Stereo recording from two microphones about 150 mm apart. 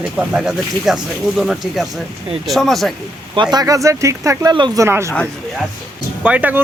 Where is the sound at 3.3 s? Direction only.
30° right (ahead or behind).